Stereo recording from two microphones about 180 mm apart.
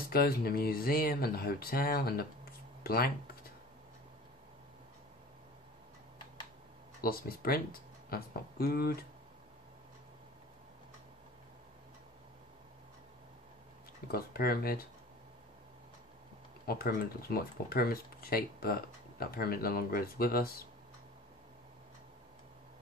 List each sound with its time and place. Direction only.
0.1 s speech: 55° left (ahead or behind)
7.0 s speech: 55° left (ahead or behind)
14.1 s speech: 55° left (ahead or behind)
16.6 s speech: 55° left (ahead or behind)